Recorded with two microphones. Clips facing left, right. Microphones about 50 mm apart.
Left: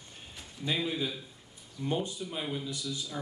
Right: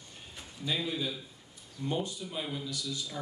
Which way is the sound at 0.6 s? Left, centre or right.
Left.